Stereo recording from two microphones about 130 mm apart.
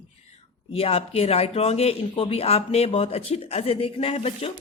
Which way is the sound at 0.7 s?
50° left (ahead or behind).